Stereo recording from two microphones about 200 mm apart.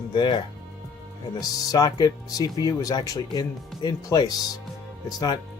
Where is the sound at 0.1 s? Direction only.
25° left (ahead or behind).